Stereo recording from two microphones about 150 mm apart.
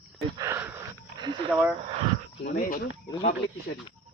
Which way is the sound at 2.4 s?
70° left (ahead or behind).